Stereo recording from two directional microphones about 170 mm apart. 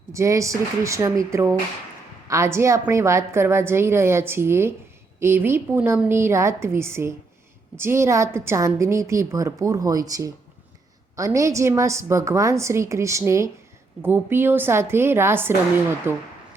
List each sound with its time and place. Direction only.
0.1 s a woman's voice: 20° right (ahead or behind)